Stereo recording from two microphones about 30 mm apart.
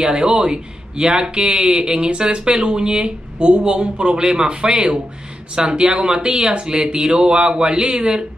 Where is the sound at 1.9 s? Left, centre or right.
Right.